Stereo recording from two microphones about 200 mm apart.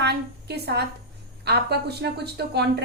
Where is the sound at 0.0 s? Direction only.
55° right (ahead or behind).